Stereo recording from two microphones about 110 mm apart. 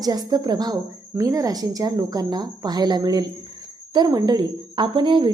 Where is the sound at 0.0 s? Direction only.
35° right (ahead or behind).